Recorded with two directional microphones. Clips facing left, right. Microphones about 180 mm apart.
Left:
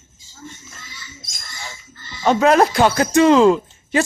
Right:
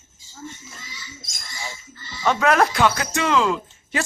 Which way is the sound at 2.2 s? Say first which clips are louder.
Left 5 dB; 25° left (ahead or behind).